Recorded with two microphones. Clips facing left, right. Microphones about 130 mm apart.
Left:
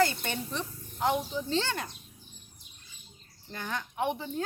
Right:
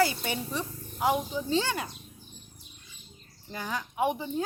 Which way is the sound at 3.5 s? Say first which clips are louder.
Right 2 dB; 10° right (ahead or behind).